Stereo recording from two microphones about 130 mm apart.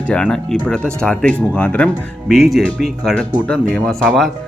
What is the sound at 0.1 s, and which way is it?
Speech, 5° left (ahead or behind).